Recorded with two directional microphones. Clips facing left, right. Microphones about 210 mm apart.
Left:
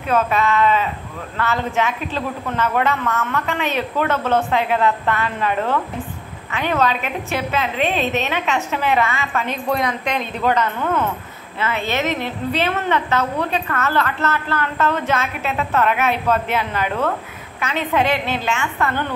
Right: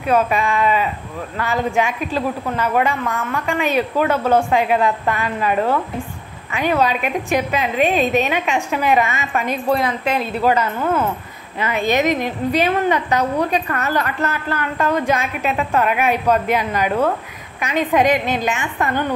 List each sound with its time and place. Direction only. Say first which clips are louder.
0.0 s a woman's voice: right 1 dB; 10° right (ahead or behind)
9.7 s a woman's voice: right 3 dB; 5° right (ahead or behind)